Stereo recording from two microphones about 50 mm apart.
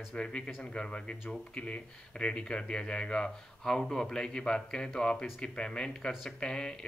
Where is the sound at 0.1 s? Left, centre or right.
Centre.